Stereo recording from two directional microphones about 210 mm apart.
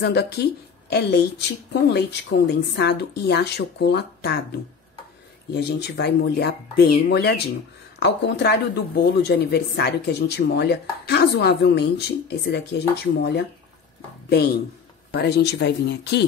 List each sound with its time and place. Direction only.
0.0 s speech: 50° left (ahead or behind)
5.5 s speech: 55° left (ahead or behind)
15.1 s speech: 50° left (ahead or behind)